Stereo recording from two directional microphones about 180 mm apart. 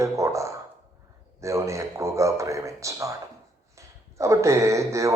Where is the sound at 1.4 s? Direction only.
15° right (ahead or behind).